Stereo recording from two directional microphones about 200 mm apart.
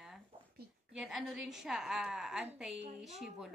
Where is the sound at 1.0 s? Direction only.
Centre (ahead or behind).